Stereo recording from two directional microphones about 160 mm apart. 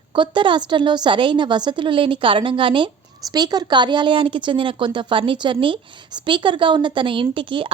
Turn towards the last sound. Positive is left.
turn(degrees=-30)  # may be behind; listen again after turning